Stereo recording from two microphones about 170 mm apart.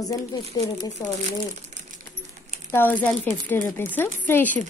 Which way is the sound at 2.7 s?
10° left (ahead or behind).